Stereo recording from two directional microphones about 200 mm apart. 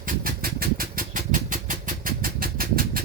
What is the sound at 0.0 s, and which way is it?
Vehicle, 45° right (ahead or behind).